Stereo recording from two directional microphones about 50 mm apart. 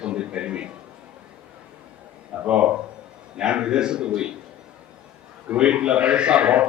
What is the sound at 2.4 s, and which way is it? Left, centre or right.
A man's voice, right.